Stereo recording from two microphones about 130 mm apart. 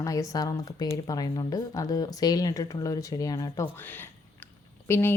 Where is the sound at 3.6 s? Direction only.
15° left (ahead or behind).